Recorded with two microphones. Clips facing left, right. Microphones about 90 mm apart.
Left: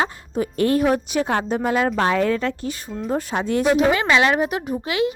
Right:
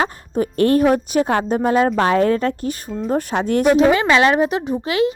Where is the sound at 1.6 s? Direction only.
35° right (ahead or behind); by 3.8 s 55° right (ahead or behind).